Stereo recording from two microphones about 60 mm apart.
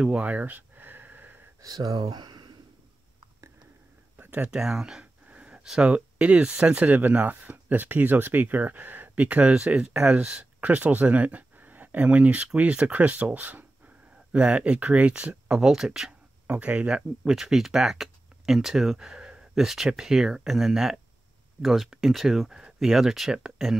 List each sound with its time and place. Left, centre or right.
0.0 s speech: centre
0.4 s a sound: right
1.6 s speech: right
4.2 s a sound: right
4.5 s speech: centre
5.3 s a sound: centre
5.8 s speech: right
14.3 s speech: centre
15.6 s speech: centre
16.4 s speech: right
17.2 s speech: centre